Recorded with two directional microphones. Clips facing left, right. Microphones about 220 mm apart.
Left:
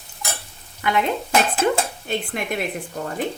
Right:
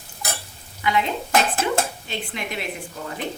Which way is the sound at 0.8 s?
50° left (ahead or behind).